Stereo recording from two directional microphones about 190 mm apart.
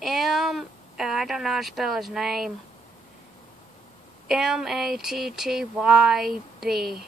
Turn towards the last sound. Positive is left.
turn(degrees=0)  # may be behind; listen again after turning